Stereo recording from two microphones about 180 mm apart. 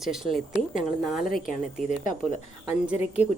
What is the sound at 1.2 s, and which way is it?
Speech, 50° left (ahead or behind).